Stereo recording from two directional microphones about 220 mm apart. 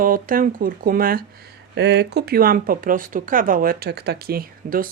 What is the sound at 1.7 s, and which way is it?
Speech, 50° right (ahead or behind).